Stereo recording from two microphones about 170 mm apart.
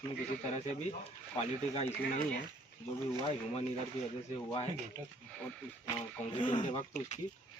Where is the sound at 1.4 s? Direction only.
35° left (ahead or behind).